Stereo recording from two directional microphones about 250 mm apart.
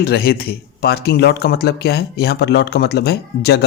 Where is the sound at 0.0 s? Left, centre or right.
Left.